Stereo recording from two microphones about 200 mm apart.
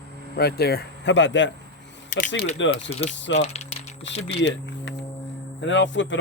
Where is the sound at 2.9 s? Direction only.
30° left (ahead or behind).